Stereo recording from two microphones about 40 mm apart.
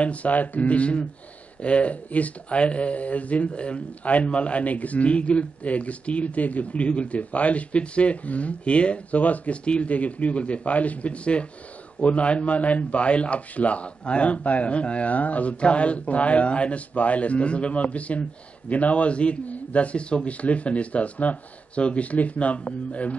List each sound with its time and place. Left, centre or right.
0.0 s speech: left